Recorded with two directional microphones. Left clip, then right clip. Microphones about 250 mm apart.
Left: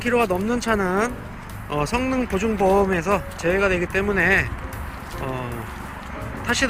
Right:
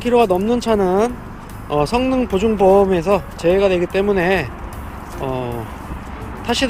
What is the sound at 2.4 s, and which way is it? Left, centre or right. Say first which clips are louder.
Speech: right 6 dB; centre.